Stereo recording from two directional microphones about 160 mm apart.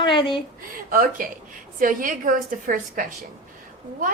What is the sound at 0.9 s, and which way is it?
A woman's voice, 60° right (ahead or behind).